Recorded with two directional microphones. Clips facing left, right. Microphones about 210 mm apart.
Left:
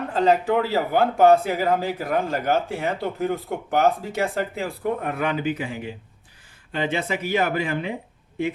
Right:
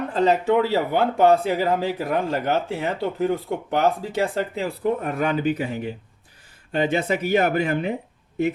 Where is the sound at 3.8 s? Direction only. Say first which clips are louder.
Left 1 dB; 30° right (ahead or behind).